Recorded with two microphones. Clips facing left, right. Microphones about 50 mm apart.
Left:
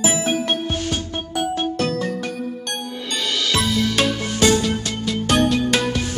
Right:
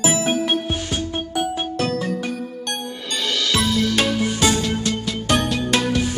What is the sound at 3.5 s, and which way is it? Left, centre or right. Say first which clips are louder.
Music: right 1 dB; centre.